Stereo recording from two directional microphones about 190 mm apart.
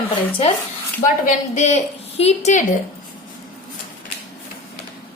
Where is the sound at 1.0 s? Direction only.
40° left (ahead or behind).